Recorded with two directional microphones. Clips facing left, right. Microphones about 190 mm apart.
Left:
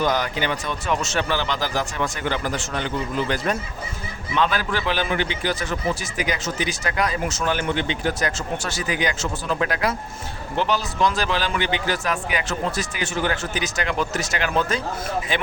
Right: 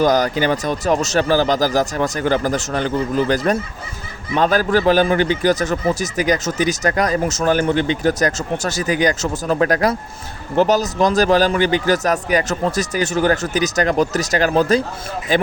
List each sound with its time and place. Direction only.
0.0 s a man's voice: 40° right (ahead or behind)